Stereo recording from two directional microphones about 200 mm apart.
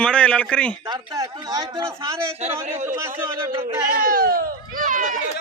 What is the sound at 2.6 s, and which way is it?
Speech, 40° right (ahead or behind).